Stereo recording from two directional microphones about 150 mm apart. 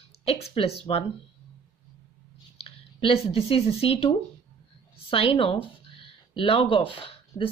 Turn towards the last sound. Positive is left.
turn(degrees=35)  # may be behind; listen again after turning